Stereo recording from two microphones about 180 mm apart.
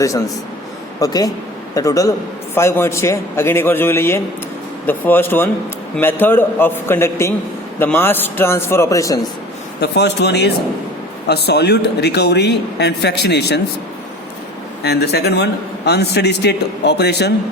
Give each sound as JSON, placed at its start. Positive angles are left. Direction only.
{"t": 0.9, "sound": "a man's voice", "side_deg": 20}
{"t": 9.8, "sound": "a man's voice", "side_deg": 70}
{"t": 14.8, "sound": "a man's voice", "side_deg": 65}